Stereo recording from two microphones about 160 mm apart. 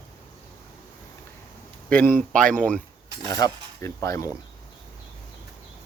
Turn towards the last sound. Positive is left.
turn(degrees=20)  # may be behind; listen again after turning